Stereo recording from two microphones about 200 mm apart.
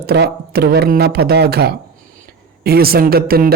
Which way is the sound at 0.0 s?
50° right (ahead or behind).